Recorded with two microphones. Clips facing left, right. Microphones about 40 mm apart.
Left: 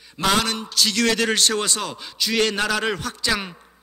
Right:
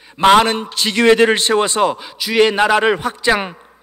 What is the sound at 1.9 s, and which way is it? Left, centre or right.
A man's voice, centre.